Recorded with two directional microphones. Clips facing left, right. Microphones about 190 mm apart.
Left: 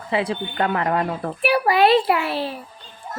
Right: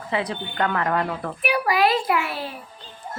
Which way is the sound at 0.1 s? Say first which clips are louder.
Left 4 dB; 25° left (ahead or behind).